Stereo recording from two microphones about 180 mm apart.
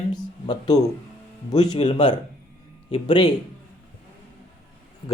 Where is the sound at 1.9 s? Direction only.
25° left (ahead or behind).